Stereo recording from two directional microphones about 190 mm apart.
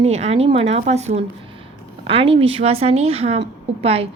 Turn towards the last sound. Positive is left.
turn(degrees=-30)  # may be behind; listen again after turning